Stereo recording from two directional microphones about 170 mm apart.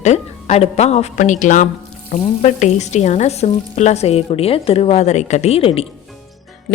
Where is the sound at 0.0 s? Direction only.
40° left (ahead or behind).